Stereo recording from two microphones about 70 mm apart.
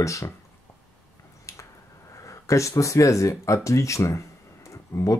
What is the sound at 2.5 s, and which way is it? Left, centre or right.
Speech, left.